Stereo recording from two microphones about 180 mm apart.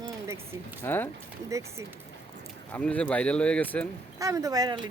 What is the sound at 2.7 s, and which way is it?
Speech, 5° left (ahead or behind).